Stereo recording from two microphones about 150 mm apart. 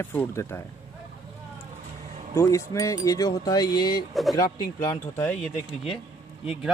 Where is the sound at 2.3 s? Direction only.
20° left (ahead or behind).